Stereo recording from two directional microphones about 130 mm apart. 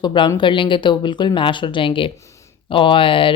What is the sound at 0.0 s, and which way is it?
Speech, 35° left (ahead or behind).